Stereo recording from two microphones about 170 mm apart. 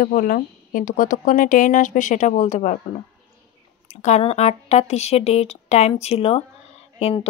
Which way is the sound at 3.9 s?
45° left (ahead or behind).